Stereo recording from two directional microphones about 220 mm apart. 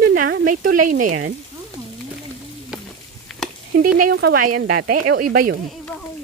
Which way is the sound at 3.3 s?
Centre (ahead or behind).